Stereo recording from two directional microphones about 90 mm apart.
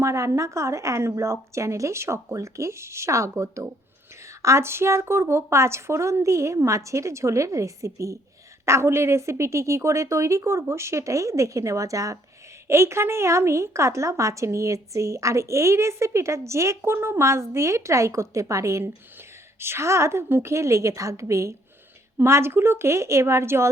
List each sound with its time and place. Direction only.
0.0 s a woman's voice: 35° right (ahead or behind)